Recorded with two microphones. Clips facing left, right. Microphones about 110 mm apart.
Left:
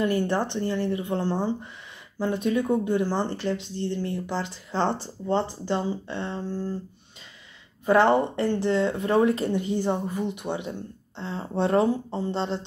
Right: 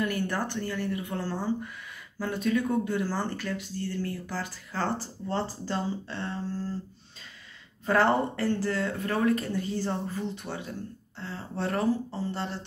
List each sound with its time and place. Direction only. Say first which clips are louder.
0.0 s speech: left 5 dB; 25° left (ahead or behind)
7.8 s speech: left 4 dB; 20° left (ahead or behind)